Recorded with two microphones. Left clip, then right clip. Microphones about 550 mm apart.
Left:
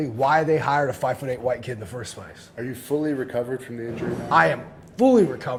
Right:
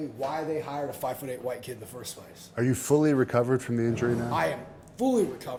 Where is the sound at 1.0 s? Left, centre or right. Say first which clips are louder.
Left 8 dB; centre.